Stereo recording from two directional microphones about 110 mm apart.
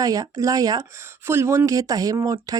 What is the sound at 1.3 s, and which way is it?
Speech, 25° right (ahead or behind).